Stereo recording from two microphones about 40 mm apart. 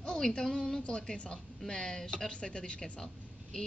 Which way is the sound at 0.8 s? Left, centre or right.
Left.